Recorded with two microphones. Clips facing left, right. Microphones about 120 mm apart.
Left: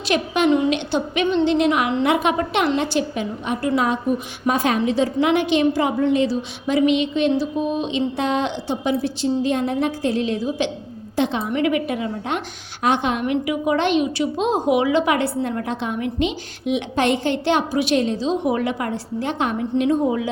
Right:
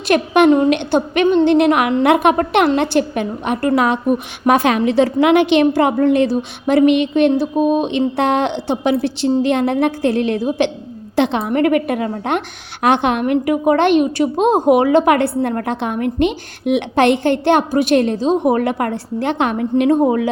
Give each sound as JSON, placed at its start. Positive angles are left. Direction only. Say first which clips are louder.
{"t": 0.1, "sound": "a woman's voice", "louder": "right 6 dB", "side_deg": -55}